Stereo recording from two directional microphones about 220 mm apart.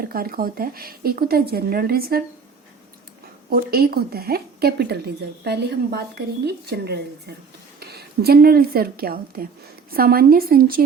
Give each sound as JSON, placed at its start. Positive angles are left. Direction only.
{"t": 0.0, "sound": "speech", "side_deg": -40}
{"t": 3.5, "sound": "a woman's voice", "side_deg": -45}